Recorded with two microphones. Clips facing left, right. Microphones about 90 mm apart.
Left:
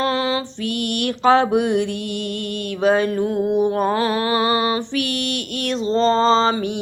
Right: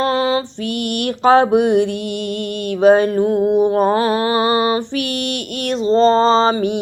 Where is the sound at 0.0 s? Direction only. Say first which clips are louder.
Right 4 dB; 45° right (ahead or behind).